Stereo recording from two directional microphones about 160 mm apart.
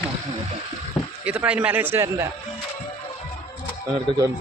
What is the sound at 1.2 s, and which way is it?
A man's voice, 5° right (ahead or behind).